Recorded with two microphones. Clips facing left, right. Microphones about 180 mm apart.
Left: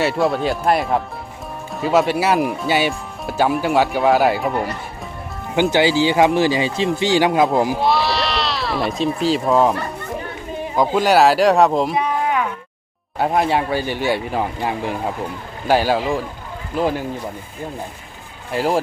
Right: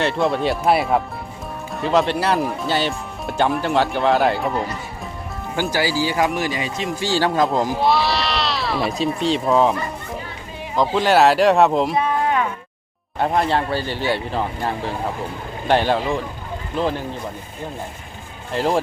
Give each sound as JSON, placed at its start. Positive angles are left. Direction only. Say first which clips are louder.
{"t": 0.0, "sound": "speech", "louder": "left 1 dB", "side_deg": 5}
{"t": 5.5, "sound": "speech", "louder": "left 6 dB", "side_deg": 25}
{"t": 7.0, "sound": "speech", "louder": "left 2 dB", "side_deg": 15}
{"t": 10.8, "sound": "speech", "louder": "left 1 dB", "side_deg": 5}
{"t": 12.0, "sound": "cattle", "louder": "even", "side_deg": 10}
{"t": 13.1, "sound": "speech", "louder": "left 1 dB", "side_deg": 10}
{"t": 18.5, "sound": "speech", "louder": "left 1 dB", "side_deg": 5}